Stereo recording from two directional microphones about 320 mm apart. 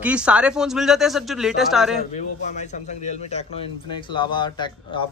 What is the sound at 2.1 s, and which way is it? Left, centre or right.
Speech, left.